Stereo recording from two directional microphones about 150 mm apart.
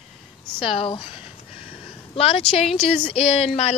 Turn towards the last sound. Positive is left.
turn(degrees=45)  # may be behind; listen again after turning